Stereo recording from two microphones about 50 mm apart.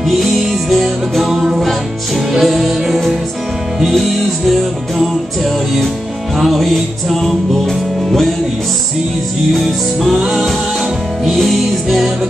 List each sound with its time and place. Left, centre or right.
0.2 s music: centre
4.5 s music: centre
6.4 s music: centre
9.5 s music: centre
10.1 s music: centre
11.2 s music: centre